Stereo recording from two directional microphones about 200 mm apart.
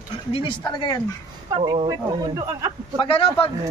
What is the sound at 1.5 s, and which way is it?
Speech, 30° right (ahead or behind).